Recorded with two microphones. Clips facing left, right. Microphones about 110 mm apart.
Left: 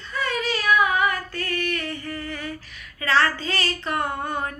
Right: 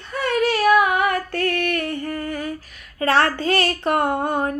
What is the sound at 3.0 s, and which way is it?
Speech, 55° right (ahead or behind).